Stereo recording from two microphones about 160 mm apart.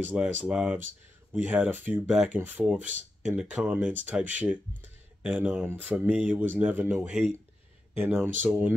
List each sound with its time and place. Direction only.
0.0 s speech: 10° right (ahead or behind)
2.8 s speech: 50° right (ahead or behind)
3.3 s speech: 10° right (ahead or behind)